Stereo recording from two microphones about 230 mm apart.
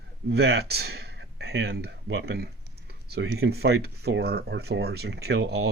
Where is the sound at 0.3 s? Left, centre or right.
Right.